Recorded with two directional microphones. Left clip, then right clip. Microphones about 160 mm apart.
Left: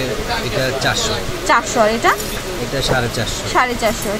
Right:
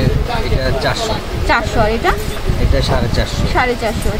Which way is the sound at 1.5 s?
10° left (ahead or behind).